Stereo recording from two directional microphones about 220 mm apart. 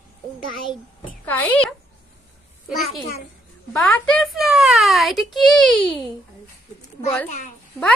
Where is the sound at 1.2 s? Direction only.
5° left (ahead or behind).